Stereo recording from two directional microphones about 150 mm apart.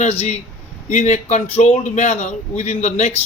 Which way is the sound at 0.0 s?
45° left (ahead or behind).